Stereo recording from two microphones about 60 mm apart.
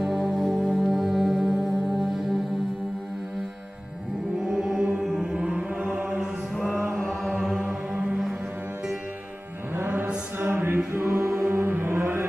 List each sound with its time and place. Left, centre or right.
0.0 s music: centre
4.5 s mantra: centre
7.0 s chant: centre
7.3 s music: centre
9.8 s mantra: right
10.4 s chant: right